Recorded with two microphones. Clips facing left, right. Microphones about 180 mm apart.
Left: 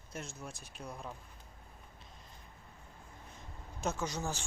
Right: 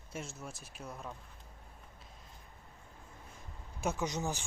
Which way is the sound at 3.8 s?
15° right (ahead or behind).